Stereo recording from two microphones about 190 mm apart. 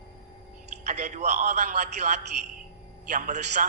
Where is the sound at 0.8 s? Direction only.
35° right (ahead or behind).